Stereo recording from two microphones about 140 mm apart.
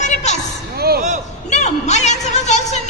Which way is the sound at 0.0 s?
55° left (ahead or behind).